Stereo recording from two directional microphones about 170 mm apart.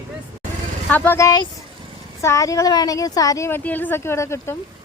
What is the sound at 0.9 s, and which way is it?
Speech, 10° left (ahead or behind).